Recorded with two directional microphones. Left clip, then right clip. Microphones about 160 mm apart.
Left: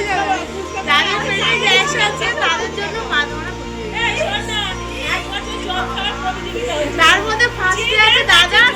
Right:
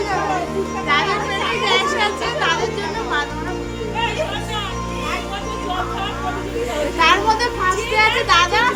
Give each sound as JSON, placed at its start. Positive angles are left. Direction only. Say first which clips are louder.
{"t": 0.9, "sound": "music", "louder": "left 4 dB", "side_deg": -90}
{"t": 1.6, "sound": "chatter", "louder": "left 1 dB", "side_deg": -90}
{"t": 7.0, "sound": "a sound", "louder": "left 2 dB", "side_deg": -90}
{"t": 7.9, "sound": "speech", "louder": "left 4 dB", "side_deg": -90}